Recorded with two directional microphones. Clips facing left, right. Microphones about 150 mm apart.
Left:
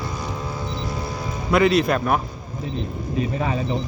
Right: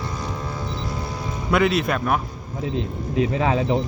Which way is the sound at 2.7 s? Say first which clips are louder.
Right 3 dB; 90° right.